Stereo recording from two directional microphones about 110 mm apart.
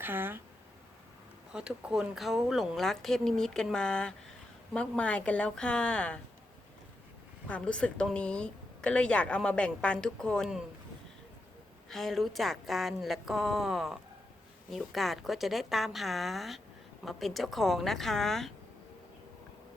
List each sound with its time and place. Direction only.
0.0 s speech: 20° right (ahead or behind)
1.5 s a woman's voice: 5° right (ahead or behind); by 6.1 s 10° left (ahead or behind)
7.4 s a woman's voice: 10° left (ahead or behind)
11.9 s a woman's voice: 5° left (ahead or behind)